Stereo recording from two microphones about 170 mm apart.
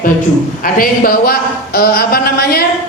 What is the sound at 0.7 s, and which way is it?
A man's voice, 60° left (ahead or behind).